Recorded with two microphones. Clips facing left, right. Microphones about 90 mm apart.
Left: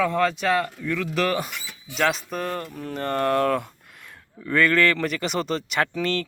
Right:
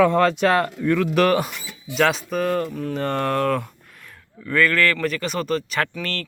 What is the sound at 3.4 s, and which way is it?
Speech, 20° left (ahead or behind).